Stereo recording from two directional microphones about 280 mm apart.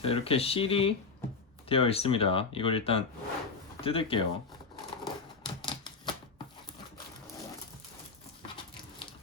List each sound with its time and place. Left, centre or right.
0.0 s speech: centre
5.0 s typewriter: centre
8.4 s a sound: centre